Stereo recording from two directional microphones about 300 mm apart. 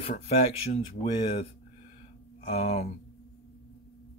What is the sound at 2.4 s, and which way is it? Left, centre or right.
Speech, left.